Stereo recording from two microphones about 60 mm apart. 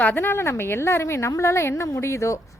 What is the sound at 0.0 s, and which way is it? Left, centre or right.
A woman's voice, left.